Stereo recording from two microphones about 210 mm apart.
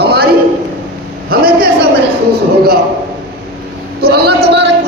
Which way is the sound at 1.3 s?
45° right (ahead or behind).